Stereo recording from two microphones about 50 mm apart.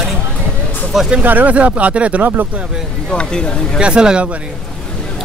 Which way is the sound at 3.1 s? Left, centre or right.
Centre.